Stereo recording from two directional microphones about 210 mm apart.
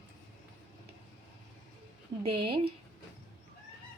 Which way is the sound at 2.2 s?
25° right (ahead or behind).